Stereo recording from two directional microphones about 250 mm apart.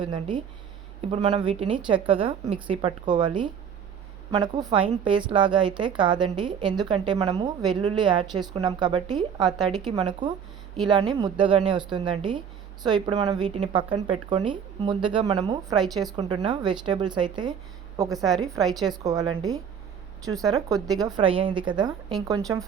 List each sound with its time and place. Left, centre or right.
0.0 s a woman's voice: centre